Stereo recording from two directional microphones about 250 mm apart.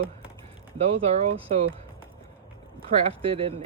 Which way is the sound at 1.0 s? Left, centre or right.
Right.